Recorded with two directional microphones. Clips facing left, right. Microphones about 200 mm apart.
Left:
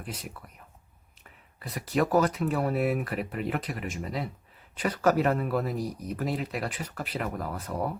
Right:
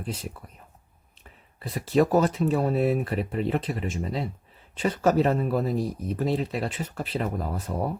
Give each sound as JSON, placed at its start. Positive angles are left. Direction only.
{"t": 0.0, "sound": "speech", "side_deg": -25}
{"t": 1.5, "sound": "speech", "side_deg": -25}